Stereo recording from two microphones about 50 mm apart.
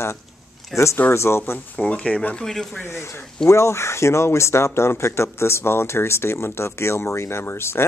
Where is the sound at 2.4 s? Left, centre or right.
Centre.